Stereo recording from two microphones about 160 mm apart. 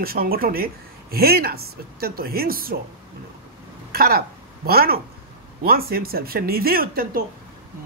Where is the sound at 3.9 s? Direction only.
70° right (ahead or behind).